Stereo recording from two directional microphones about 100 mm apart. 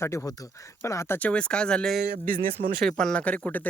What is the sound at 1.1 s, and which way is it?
Speech, 10° left (ahead or behind).